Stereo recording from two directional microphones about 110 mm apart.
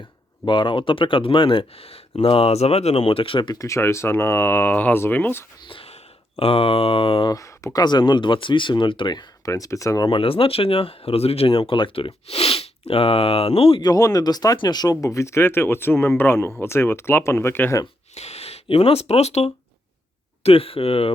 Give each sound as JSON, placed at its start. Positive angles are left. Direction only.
{"t": 0.4, "sound": "speech", "side_deg": 45}
{"t": 3.5, "sound": "speech", "side_deg": 30}
{"t": 5.6, "sound": "speech", "side_deg": 55}
{"t": 7.3, "sound": "speech", "side_deg": 30}
{"t": 9.5, "sound": "speech", "side_deg": 30}
{"t": 10.1, "sound": "speech", "side_deg": 55}
{"t": 13.8, "sound": "speech", "side_deg": 35}
{"t": 18.1, "sound": "speech", "side_deg": 75}
{"t": 20.4, "sound": "speech", "side_deg": 60}